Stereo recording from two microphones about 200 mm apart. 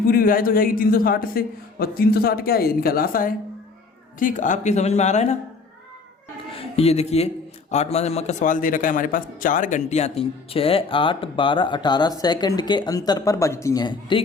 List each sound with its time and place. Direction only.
0.0 s a man's voice: 50° left (ahead or behind)
6.6 s a man's voice: 30° left (ahead or behind)